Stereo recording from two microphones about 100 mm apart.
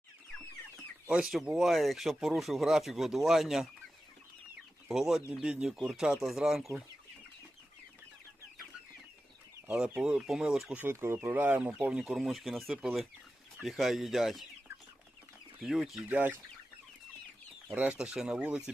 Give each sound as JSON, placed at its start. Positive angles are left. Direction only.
{"t": 1.0, "sound": "speech", "side_deg": -5}
{"t": 4.9, "sound": "speech", "side_deg": -5}
{"t": 9.7, "sound": "speech", "side_deg": -10}
{"t": 10.8, "sound": "speech", "side_deg": -25}
{"t": 15.6, "sound": "speech", "side_deg": 0}
{"t": 16.0, "sound": "speech", "side_deg": -20}
{"t": 17.7, "sound": "speech", "side_deg": -10}